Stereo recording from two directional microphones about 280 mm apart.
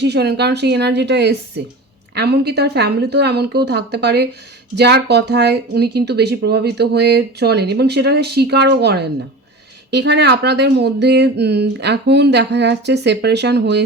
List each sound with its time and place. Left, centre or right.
0.0 s speech: right